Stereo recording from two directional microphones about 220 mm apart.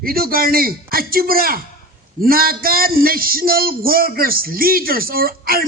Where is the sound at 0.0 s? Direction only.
40° right (ahead or behind).